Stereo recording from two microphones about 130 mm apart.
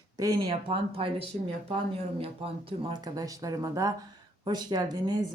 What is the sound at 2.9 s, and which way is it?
Speech, 30° right (ahead or behind).